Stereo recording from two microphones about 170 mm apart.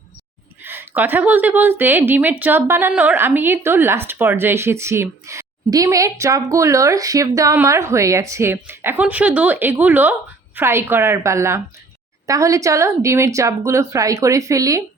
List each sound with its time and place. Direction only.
0.6 s a woman's voice: 10° right (ahead or behind)